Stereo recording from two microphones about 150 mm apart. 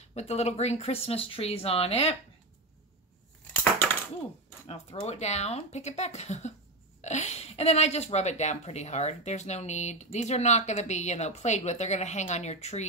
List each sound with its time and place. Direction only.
0.0 s a woman's voice: 45° left (ahead or behind)
4.6 s a woman's voice: 45° left (ahead or behind)